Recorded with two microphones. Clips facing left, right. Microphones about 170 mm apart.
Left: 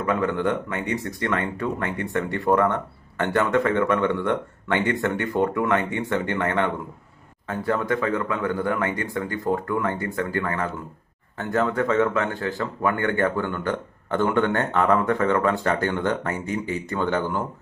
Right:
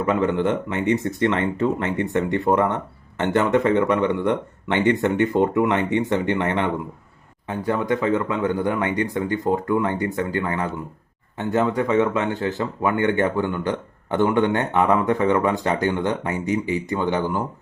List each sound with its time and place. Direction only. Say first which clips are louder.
0.0 s speech: right 3 dB; 25° right (ahead or behind)